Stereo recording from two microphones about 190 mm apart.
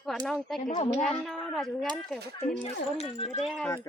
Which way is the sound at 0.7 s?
35° left (ahead or behind).